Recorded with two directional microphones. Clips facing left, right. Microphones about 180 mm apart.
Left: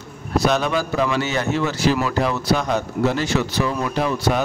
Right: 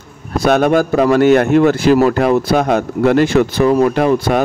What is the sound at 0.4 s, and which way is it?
A man's voice, 55° right (ahead or behind).